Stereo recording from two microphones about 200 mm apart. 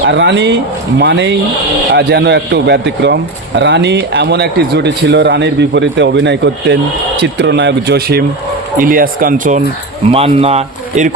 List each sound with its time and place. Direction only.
0.1 s a man's voice: 60° right (ahead or behind); by 9.6 s 40° right (ahead or behind)
10.1 s speech: 30° right (ahead or behind)